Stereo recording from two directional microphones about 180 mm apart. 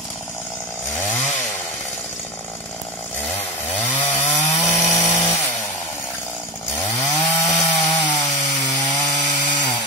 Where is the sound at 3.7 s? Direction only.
10° left (ahead or behind).